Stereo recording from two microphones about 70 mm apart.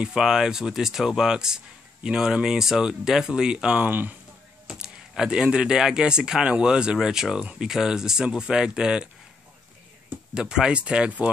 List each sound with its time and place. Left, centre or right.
0.0 s speech: centre
3.8 s speech: right
4.6 s speech: centre
10.3 s speech: centre